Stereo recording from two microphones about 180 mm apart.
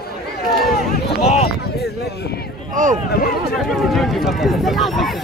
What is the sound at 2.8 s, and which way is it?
Speech, 45° right (ahead or behind).